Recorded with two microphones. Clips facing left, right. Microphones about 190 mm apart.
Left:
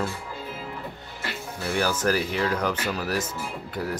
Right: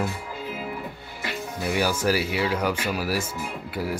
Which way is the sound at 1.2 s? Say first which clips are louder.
Right 3 dB; 10° right (ahead or behind).